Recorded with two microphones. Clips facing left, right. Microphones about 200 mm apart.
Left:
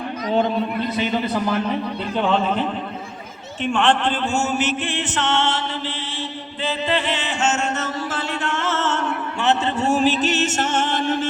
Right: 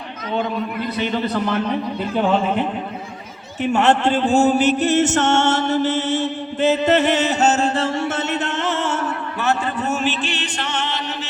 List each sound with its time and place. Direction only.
0.3 s speech: 35° left (ahead or behind)
0.9 s a man's voice: 15° left (ahead or behind)
2.1 s speech: 10° right (ahead or behind)
3.8 s speech: 10° right (ahead or behind)
4.3 s mantra: 35° right (ahead or behind); by 9.1 s 10° right (ahead or behind)
9.4 s music: 20° left (ahead or behind); by 11.3 s 50° left (ahead or behind)